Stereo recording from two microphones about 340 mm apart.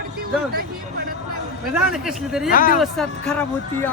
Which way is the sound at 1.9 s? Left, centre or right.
Centre.